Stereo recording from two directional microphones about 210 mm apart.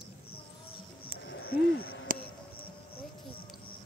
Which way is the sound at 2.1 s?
40° right (ahead or behind).